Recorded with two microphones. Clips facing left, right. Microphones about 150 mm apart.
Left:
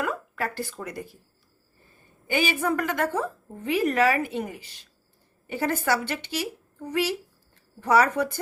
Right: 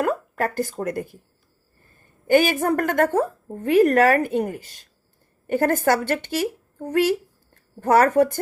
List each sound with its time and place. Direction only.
0.0 s speech: 45° right (ahead or behind)
2.2 s a woman's voice: 50° right (ahead or behind)